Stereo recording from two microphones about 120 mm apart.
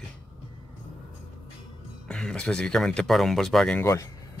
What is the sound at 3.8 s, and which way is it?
Speech, 25° left (ahead or behind).